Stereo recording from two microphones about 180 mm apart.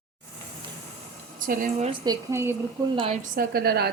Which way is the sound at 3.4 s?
60° right (ahead or behind).